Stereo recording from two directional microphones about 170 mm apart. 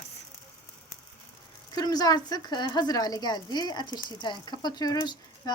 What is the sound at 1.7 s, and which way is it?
Speech, 25° left (ahead or behind).